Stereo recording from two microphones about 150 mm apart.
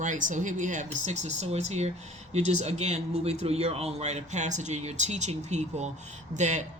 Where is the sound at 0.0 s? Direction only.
60° right (ahead or behind).